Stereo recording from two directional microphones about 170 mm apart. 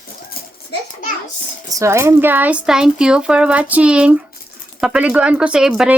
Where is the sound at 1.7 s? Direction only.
15° right (ahead or behind).